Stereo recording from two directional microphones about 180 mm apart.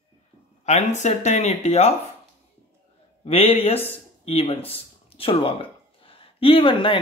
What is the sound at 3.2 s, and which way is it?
Speech, 35° left (ahead or behind).